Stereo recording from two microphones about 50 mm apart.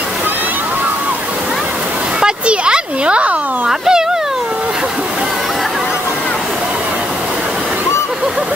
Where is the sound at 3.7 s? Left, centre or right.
Centre.